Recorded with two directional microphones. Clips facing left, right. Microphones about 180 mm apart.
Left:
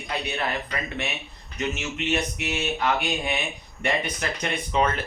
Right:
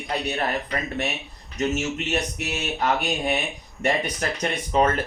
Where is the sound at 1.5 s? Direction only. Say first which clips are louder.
Right 5 dB; 40° right (ahead or behind).